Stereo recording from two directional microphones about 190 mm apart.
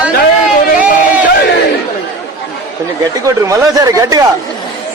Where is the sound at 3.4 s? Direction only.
20° right (ahead or behind).